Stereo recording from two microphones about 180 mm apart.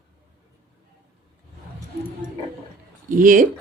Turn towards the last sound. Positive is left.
turn(degrees=-50)  # may be behind; listen again after turning